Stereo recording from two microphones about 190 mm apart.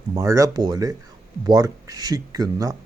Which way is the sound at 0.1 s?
15° right (ahead or behind).